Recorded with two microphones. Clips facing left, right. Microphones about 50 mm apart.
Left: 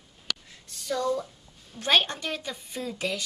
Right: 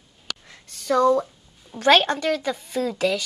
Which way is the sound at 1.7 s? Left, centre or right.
Right.